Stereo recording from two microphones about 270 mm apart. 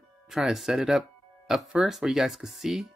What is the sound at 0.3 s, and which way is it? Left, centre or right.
Speech, centre.